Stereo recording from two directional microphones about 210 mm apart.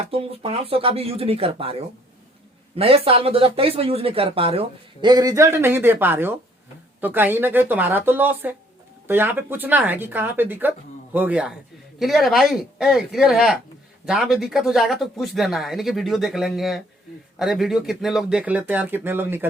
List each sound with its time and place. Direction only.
0.0 s speech: 25° right (ahead or behind); by 19.5 s 10° right (ahead or behind)